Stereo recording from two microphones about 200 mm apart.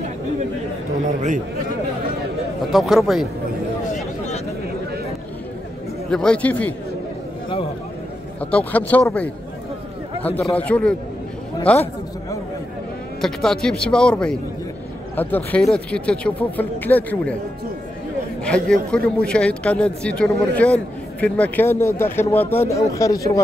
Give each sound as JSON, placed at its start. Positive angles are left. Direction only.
{"t": 2.7, "sound": "speech", "side_deg": 0}
{"t": 3.8, "sound": "a sound", "side_deg": 40}
{"t": 6.0, "sound": "speech", "side_deg": 5}
{"t": 8.4, "sound": "a man's voice", "side_deg": 5}
{"t": 18.4, "sound": "a man's voice", "side_deg": 5}